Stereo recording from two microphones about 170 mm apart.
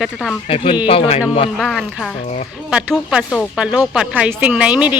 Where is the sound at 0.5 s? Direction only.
30° left (ahead or behind).